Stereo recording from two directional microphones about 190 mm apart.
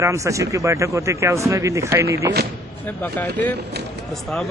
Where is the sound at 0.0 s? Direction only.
15° right (ahead or behind).